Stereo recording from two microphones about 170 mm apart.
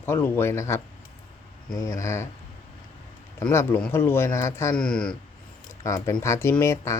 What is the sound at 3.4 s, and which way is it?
Speech, 15° left (ahead or behind).